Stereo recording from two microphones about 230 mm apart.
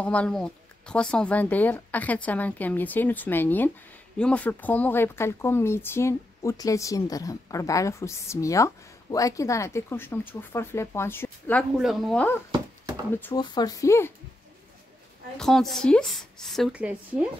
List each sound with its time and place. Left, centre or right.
0.0 s speech: centre
13.3 s speech: centre
15.3 s speech: centre